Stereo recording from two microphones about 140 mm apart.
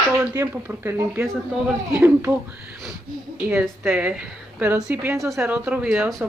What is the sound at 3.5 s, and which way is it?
A woman's voice, 10° right (ahead or behind).